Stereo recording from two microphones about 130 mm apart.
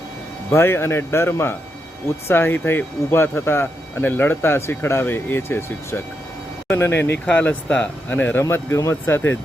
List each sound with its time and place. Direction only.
0.5 s speech: 20° left (ahead or behind)